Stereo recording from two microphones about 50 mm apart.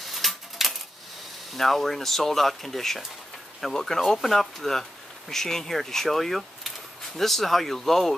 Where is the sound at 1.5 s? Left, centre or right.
Centre.